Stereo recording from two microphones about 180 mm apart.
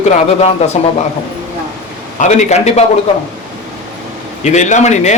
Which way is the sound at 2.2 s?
40° left (ahead or behind).